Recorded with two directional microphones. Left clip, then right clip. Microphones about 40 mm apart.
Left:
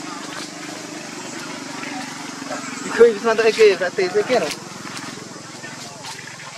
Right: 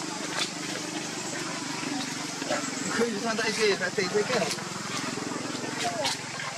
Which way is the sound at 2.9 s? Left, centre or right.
Centre.